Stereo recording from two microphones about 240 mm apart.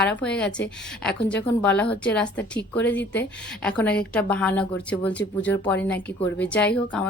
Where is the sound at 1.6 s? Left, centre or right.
Centre.